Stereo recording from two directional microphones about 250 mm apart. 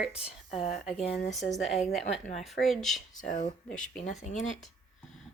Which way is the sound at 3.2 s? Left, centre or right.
Left.